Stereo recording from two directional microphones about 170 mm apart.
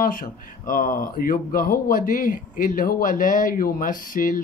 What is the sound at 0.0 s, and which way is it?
Speech, 55° left (ahead or behind).